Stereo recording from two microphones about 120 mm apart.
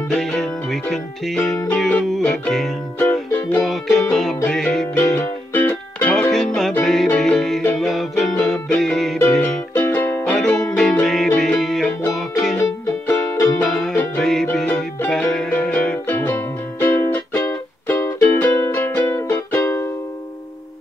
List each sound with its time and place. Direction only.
0.1 s music: 5° left (ahead or behind)
3.0 s music: 15° left (ahead or behind)
3.6 s music: centre (ahead or behind)
5.1 s music: 15° left (ahead or behind)
9.4 s music: 15° left (ahead or behind)
10.8 s music: 5° left (ahead or behind)
12.5 s music: 20° left (ahead or behind)
13.7 s music: 5° left (ahead or behind); by 19.9 s 20° left (ahead or behind)